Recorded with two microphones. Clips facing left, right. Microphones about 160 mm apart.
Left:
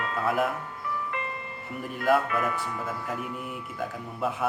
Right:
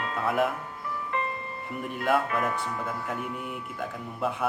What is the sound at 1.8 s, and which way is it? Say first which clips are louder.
Speech: left 2 dB; centre (ahead or behind).